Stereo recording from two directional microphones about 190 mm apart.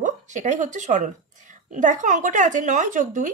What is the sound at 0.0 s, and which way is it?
A woman's voice, 40° right (ahead or behind).